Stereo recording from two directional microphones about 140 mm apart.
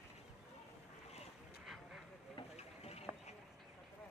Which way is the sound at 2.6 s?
50° left (ahead or behind).